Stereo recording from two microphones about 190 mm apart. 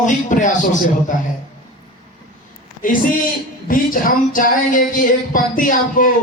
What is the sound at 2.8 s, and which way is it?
Speech, 45° left (ahead or behind).